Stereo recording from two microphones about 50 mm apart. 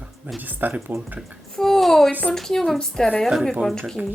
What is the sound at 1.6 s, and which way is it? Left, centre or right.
A woman's voice, centre.